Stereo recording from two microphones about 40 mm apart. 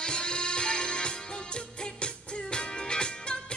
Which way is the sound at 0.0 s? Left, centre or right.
Left.